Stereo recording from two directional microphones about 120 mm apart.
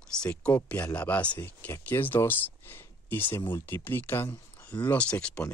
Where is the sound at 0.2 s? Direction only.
10° left (ahead or behind).